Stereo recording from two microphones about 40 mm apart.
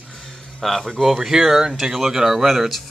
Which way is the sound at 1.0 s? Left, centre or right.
Centre.